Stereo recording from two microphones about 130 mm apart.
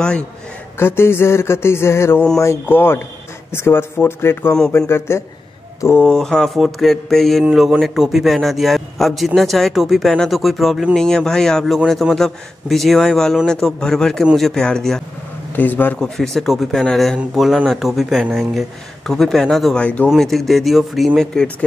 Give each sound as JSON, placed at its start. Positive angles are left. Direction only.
{"t": 0.7, "sound": "speech", "side_deg": 20}
{"t": 6.0, "sound": "a man's voice", "side_deg": 5}
{"t": 16.2, "sound": "a man's voice", "side_deg": 0}